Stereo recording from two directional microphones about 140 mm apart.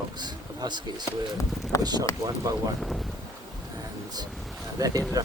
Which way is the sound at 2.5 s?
25° right (ahead or behind).